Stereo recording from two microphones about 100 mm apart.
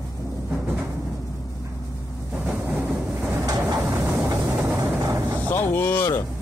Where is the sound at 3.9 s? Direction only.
30° right (ahead or behind).